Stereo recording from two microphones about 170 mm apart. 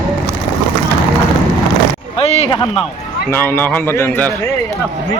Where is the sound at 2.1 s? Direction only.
35° left (ahead or behind).